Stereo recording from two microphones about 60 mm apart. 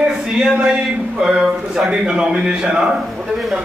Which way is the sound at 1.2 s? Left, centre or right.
Centre.